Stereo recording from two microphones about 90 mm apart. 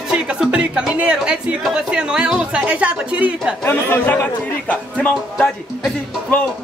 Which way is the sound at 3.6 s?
25° left (ahead or behind).